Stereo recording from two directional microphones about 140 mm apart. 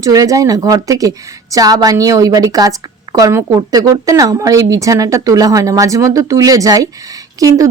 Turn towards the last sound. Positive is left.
turn(degrees=-25)  # may be behind; listen again after turning